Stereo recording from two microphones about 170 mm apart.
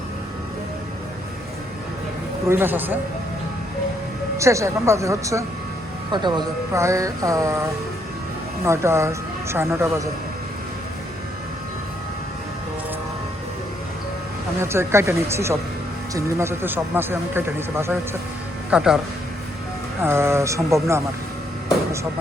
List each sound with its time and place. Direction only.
2.5 s speech: 10° right (ahead or behind)
4.4 s speech: 15° right (ahead or behind)
8.6 s speech: 15° right (ahead or behind)
14.6 s speech: 15° right (ahead or behind)
18.7 s speech: 5° right (ahead or behind)
20.0 s speech: 15° right (ahead or behind)